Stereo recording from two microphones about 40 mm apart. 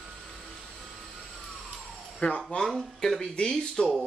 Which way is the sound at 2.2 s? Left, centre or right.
Left.